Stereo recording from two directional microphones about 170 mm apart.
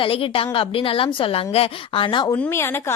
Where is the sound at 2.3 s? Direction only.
15° left (ahead or behind).